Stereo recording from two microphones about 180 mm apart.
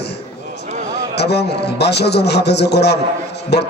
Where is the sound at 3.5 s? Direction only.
65° left (ahead or behind).